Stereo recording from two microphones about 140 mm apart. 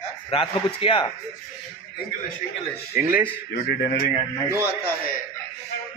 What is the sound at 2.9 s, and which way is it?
Speech, 15° right (ahead or behind).